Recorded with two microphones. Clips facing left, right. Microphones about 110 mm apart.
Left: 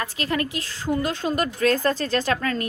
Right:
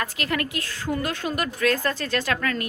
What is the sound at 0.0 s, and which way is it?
A woman's voice, 25° left (ahead or behind).